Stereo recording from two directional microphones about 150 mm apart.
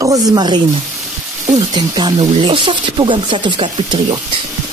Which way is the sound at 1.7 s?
30° right (ahead or behind).